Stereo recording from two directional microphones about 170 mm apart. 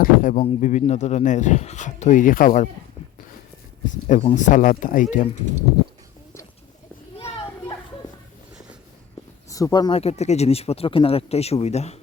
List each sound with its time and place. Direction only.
0.0 s speech: 50° left (ahead or behind)
4.0 s speech: 40° left (ahead or behind)
5.1 s speech: 40° left (ahead or behind)
9.5 s speech: 20° left (ahead or behind)
9.9 s speech: 35° left (ahead or behind)